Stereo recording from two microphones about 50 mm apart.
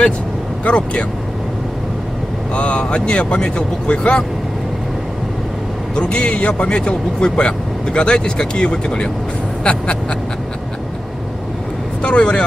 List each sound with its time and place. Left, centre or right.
0.7 s speech: left
2.5 s speech: left
5.9 s speech: left
12.0 s speech: left